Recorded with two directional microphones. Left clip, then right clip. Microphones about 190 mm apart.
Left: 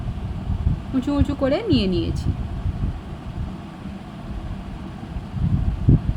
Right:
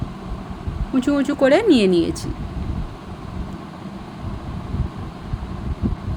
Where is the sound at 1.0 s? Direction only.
15° right (ahead or behind).